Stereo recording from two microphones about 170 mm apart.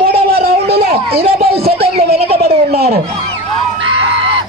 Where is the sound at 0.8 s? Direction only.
35° right (ahead or behind).